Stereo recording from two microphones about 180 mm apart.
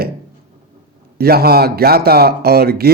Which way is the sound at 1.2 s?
60° right (ahead or behind).